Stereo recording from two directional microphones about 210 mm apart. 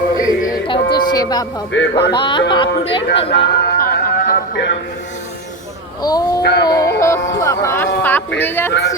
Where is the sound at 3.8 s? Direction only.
45° left (ahead or behind).